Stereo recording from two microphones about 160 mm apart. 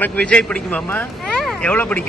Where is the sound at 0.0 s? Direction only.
10° left (ahead or behind).